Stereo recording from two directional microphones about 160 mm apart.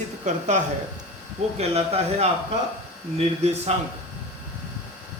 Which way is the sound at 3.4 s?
40° right (ahead or behind).